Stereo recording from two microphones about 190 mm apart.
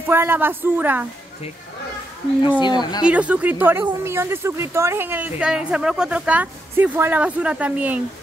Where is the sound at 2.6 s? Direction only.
20° left (ahead or behind).